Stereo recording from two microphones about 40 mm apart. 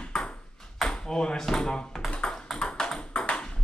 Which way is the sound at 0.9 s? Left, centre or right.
Centre.